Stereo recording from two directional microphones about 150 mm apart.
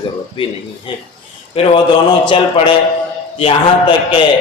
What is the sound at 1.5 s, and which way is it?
A man's voice, 40° left (ahead or behind).